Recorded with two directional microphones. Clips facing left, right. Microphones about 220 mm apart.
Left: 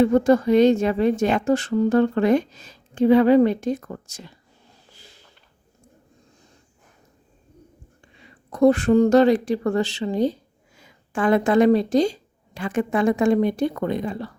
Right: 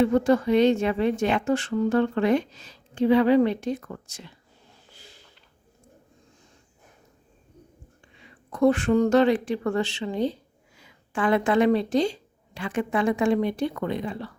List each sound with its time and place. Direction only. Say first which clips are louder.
0.0 s a woman's voice: left 4 dB; 45° left (ahead or behind)
8.2 s speech: left 4 dB; 40° left (ahead or behind)